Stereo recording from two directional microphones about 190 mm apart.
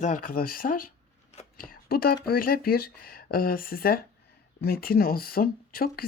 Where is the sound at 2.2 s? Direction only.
50° left (ahead or behind).